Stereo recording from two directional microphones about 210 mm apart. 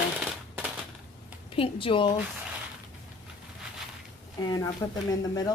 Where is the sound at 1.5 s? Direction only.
25° left (ahead or behind).